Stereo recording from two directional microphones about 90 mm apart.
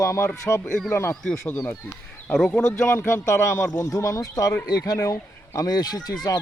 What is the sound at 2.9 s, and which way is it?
Speech, 30° left (ahead or behind).